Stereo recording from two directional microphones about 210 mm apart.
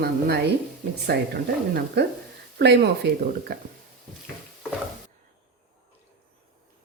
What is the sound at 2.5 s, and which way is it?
Speech, 55° right (ahead or behind).